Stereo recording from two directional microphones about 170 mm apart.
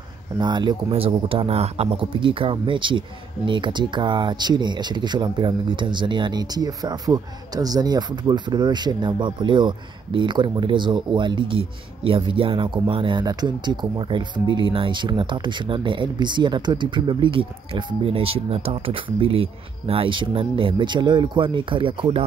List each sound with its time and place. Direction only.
0.4 s speech: 25° right (ahead or behind)